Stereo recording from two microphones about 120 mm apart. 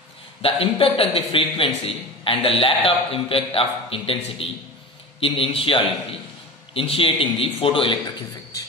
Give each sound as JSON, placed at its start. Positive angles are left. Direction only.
{"t": 0.4, "sound": "a man's voice", "side_deg": 50}